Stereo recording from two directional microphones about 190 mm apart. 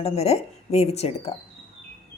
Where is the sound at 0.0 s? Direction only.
35° left (ahead or behind).